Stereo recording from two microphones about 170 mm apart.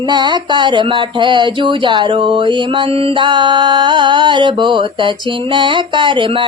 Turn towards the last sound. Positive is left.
turn(degrees=-30)  # may be behind; listen again after turning